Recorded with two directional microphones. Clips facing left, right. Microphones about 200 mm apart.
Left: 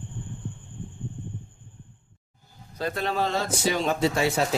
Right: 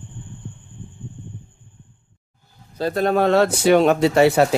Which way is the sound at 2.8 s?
35° right (ahead or behind).